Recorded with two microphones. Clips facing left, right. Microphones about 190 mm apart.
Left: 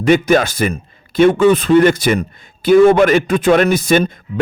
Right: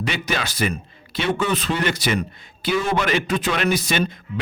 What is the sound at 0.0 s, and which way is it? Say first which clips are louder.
A man's voice: left 14 dB; 50° left (ahead or behind).